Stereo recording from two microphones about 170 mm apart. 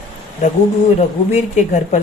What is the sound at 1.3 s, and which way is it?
Speech, 45° left (ahead or behind).